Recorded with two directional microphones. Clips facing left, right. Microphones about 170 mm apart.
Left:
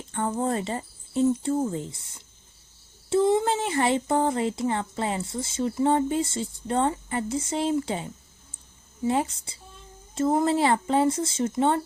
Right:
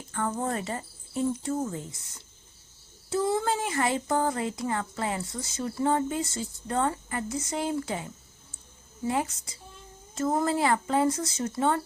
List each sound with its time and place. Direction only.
0.1 s speech: 25° left (ahead or behind)
3.1 s speech: 25° left (ahead or behind)